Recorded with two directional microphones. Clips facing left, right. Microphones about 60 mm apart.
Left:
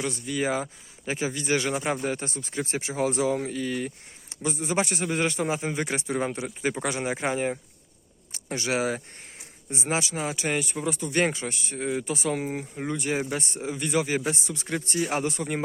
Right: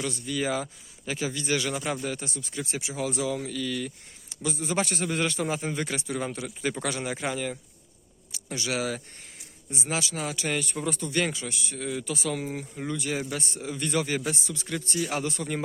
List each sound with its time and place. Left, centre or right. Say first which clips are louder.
0.0 s a man's voice: left 2 dB; left
11.1 s a man's voice: left 6 dB; left
13.7 s a man's voice: left 2 dB; centre
14.3 s a man's voice: left 2 dB; left